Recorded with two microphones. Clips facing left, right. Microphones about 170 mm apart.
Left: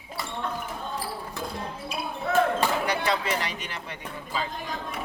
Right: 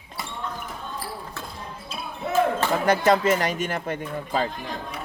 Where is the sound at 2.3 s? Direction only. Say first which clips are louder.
Right 1 dB; 20° right (ahead or behind).